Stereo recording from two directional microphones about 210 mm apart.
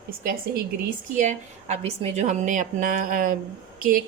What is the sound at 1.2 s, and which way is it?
A woman's voice, 35° right (ahead or behind).